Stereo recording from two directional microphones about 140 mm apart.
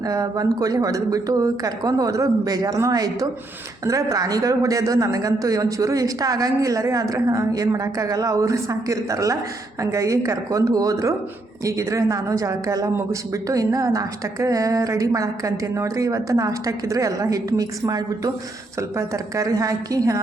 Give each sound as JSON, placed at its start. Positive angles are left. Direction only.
{"t": 0.0, "sound": "speech", "side_deg": -25}